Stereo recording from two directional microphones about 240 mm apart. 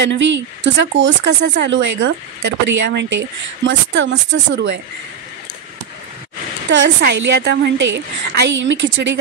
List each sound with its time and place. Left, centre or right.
0.0 s speech: right
6.7 s speech: right